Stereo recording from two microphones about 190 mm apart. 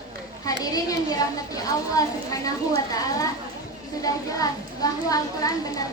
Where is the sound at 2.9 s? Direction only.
20° left (ahead or behind).